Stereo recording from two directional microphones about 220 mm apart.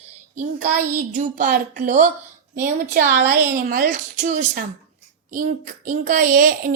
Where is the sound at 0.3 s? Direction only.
35° right (ahead or behind).